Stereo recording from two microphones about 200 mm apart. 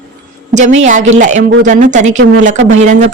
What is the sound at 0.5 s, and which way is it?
A woman's voice, 35° right (ahead or behind).